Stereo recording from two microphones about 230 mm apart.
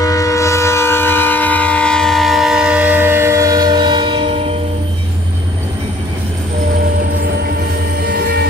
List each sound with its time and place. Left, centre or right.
0.0 s train: centre; by 4.6 s right
8.1 s music: right